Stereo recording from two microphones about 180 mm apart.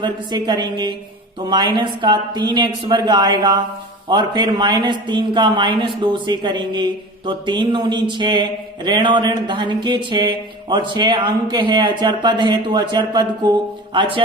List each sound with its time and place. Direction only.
0.0 s mantra: 25° right (ahead or behind)